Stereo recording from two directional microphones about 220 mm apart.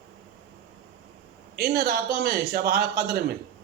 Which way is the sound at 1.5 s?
45° right (ahead or behind).